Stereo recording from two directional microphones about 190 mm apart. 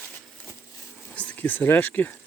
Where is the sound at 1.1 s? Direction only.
5° left (ahead or behind).